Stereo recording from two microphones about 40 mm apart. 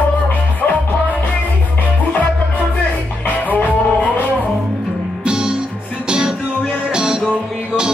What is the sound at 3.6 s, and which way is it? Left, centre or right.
Music, left.